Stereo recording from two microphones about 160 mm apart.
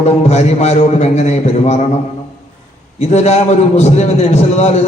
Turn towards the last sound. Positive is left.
turn(degrees=40)  # may be behind; listen again after turning